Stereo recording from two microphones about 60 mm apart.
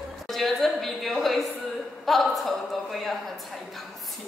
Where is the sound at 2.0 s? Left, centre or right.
Centre.